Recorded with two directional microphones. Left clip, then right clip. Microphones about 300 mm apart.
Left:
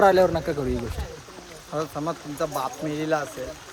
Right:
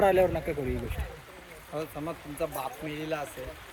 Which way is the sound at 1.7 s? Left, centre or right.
Centre.